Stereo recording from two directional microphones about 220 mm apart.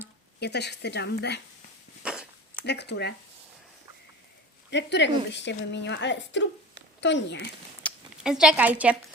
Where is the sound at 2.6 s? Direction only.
50° left (ahead or behind).